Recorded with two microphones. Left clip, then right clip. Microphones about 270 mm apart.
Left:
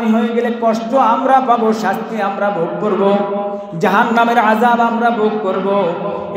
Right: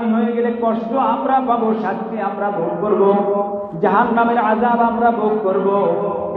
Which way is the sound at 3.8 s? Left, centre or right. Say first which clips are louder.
Left 2 dB; left.